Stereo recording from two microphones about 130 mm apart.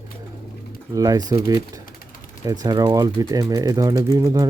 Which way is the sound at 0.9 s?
30° right (ahead or behind).